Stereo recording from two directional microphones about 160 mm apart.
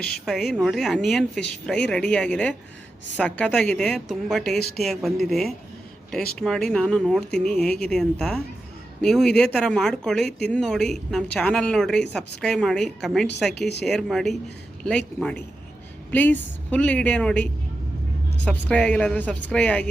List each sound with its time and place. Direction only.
0.0 s speech: 5° left (ahead or behind)
13.6 s speech: 90° left
13.8 s speech: centre (ahead or behind)